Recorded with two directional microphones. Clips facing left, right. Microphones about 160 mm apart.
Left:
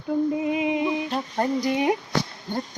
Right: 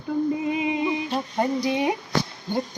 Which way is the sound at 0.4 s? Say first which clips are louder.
Left 1 dB; centre (ahead or behind).